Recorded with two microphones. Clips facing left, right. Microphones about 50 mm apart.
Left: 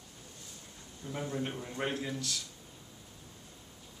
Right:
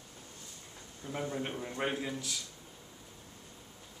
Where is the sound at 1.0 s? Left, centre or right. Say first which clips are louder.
Even; centre.